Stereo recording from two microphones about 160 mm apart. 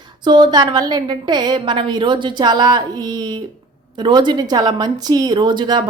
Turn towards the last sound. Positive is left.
turn(degrees=-30)  # may be behind; listen again after turning